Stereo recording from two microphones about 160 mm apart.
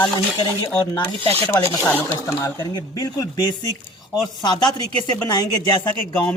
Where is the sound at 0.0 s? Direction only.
25° left (ahead or behind).